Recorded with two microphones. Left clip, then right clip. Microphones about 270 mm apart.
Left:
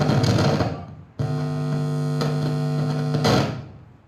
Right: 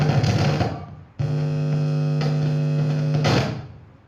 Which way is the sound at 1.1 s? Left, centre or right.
Left.